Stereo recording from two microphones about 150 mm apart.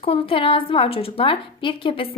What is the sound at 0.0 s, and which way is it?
A woman's voice, 40° left (ahead or behind).